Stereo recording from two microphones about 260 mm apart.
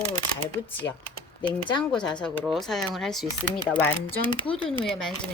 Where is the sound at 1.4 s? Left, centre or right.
Centre.